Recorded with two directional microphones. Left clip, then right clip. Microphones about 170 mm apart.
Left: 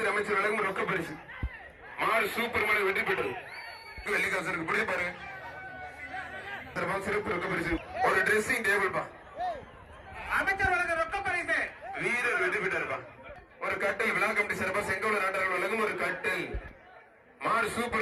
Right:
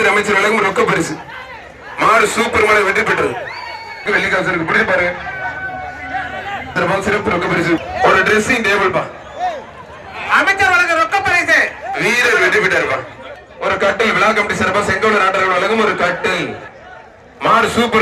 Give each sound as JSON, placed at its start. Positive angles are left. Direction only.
{"t": 0.0, "sound": "a man's voice", "side_deg": -65}
{"t": 4.0, "sound": "a man's voice", "side_deg": -20}
{"t": 6.7, "sound": "speech", "side_deg": -35}
{"t": 10.2, "sound": "a sound", "side_deg": -90}
{"t": 13.6, "sound": "a man's voice", "side_deg": -25}
{"t": 17.4, "sound": "speech", "side_deg": -40}